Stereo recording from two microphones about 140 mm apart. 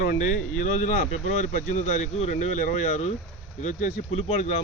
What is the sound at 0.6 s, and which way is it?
Speech, 60° left (ahead or behind).